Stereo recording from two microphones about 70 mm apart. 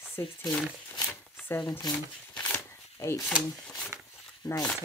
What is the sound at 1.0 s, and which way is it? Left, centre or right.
Shuffling cards, left.